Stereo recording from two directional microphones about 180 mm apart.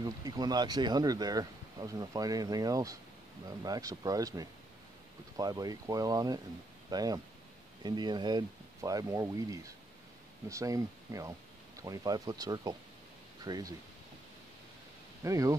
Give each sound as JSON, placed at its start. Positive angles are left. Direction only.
{"t": 0.0, "sound": "speech", "side_deg": -20}
{"t": 15.2, "sound": "speech", "side_deg": -15}